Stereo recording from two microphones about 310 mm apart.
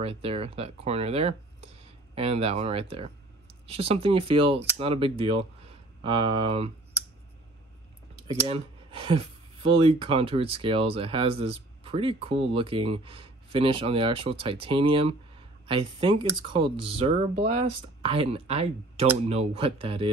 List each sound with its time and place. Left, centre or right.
0.0 s speech: centre
8.3 s speech: centre